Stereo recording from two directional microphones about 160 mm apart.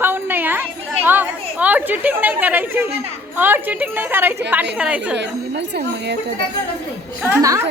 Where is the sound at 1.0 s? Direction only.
10° right (ahead or behind).